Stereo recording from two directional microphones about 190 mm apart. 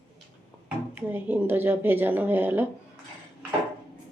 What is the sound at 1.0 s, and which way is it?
A woman's voice, 10° right (ahead or behind).